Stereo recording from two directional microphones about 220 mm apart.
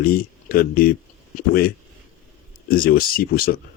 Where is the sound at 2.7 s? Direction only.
40° left (ahead or behind).